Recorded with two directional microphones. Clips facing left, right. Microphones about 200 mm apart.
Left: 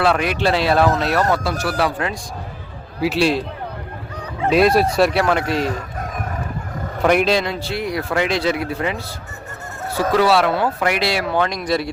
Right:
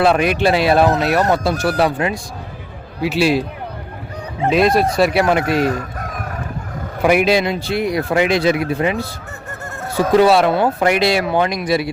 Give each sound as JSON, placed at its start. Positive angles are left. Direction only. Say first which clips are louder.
{"t": 0.0, "sound": "speech", "louder": "right 4 dB", "side_deg": -15}
{"t": 3.0, "sound": "speech", "louder": "right 2 dB", "side_deg": 0}
{"t": 4.4, "sound": "speech", "louder": "even", "side_deg": 0}
{"t": 5.1, "sound": "speech", "louder": "right 3 dB", "side_deg": -15}
{"t": 7.0, "sound": "speech", "louder": "right 2 dB", "side_deg": -10}
{"t": 10.0, "sound": "speech", "louder": "right 4 dB", "side_deg": -20}